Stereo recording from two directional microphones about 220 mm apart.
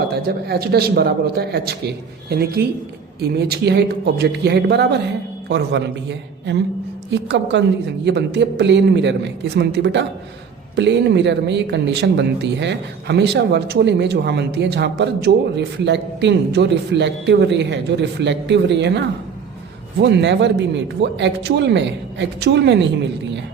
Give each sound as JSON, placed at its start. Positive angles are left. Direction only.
{"t": 0.2, "sound": "speech", "side_deg": -45}